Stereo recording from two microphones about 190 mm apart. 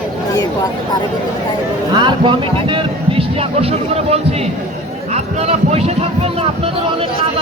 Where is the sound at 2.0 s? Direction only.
25° right (ahead or behind).